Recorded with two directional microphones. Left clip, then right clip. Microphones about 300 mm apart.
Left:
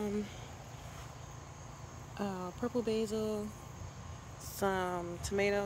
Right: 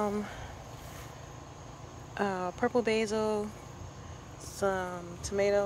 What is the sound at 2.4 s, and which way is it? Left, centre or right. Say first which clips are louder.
Speech: right 8 dB; centre.